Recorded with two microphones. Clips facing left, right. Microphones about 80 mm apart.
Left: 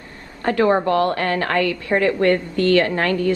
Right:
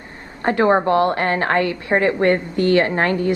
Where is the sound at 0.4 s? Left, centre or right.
Right.